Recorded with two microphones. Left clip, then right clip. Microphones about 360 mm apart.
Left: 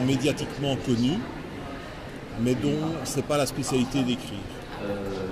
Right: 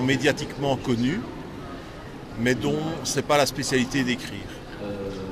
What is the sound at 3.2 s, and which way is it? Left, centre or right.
Speech, right.